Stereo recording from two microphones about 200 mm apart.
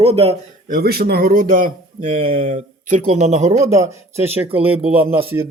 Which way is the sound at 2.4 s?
40° right (ahead or behind).